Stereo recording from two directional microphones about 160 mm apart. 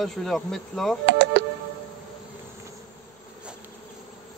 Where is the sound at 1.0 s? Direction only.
90° right.